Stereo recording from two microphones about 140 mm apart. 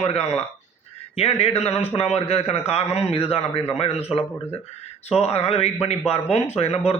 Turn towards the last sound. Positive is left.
turn(degrees=50)  # may be behind; listen again after turning